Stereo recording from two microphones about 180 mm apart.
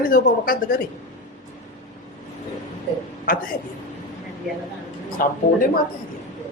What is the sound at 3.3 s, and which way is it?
Speech, 50° left (ahead or behind).